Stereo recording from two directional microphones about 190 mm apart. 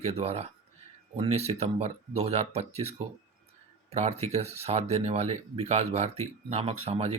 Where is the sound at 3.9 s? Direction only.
35° right (ahead or behind).